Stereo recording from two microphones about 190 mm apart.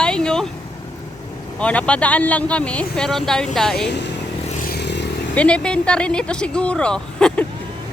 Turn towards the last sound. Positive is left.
turn(degrees=5)  # may be behind; listen again after turning